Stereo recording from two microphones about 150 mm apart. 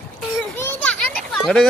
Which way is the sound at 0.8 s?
5° left (ahead or behind).